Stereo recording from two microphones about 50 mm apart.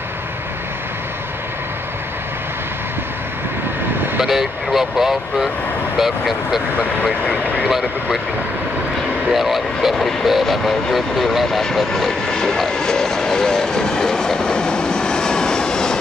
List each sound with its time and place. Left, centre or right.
4.2 s speech: centre
7.2 s speech: left
9.3 s speech: centre